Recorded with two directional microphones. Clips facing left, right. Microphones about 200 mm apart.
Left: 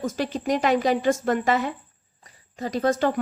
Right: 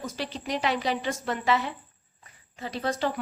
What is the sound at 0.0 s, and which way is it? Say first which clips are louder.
A woman's voice: left 8 dB; 45° left (ahead or behind).